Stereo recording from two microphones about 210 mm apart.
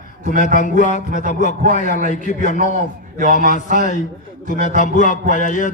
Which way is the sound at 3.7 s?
35° left (ahead or behind).